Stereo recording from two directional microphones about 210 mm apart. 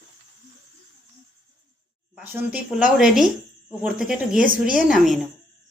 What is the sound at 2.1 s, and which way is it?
A woman's voice, 5° right (ahead or behind).